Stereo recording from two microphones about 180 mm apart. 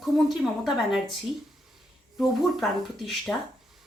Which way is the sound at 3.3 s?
10° left (ahead or behind).